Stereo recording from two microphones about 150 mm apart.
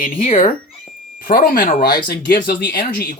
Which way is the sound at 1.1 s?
75° left (ahead or behind).